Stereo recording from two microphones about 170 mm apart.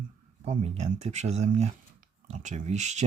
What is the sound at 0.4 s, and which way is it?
Speech, 35° right (ahead or behind).